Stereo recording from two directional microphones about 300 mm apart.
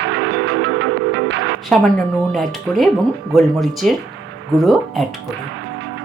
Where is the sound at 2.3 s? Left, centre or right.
Centre.